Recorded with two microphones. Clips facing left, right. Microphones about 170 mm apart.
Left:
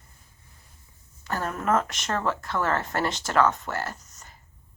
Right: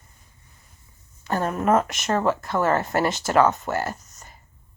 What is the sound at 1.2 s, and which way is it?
Speech, 20° right (ahead or behind).